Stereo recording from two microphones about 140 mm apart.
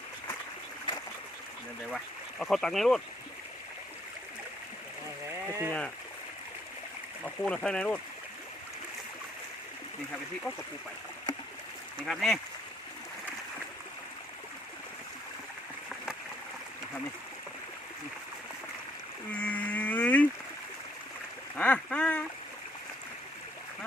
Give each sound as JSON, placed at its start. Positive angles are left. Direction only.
{"t": 2.4, "sound": "speech", "side_deg": 5}
{"t": 5.3, "sound": "speech", "side_deg": -20}
{"t": 7.3, "sound": "speech", "side_deg": 5}
{"t": 12.0, "sound": "speech", "side_deg": 0}
{"t": 19.4, "sound": "frog", "side_deg": 10}
{"t": 21.5, "sound": "a sound", "side_deg": 10}